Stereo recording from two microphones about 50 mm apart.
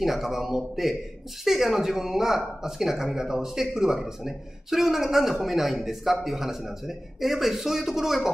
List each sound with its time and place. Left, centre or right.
0.0 s speech: centre